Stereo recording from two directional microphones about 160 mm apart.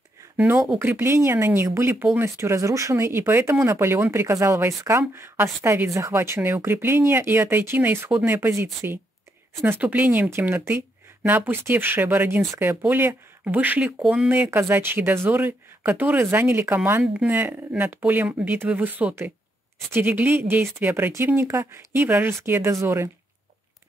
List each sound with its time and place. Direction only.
0.7 s speech: 15° right (ahead or behind)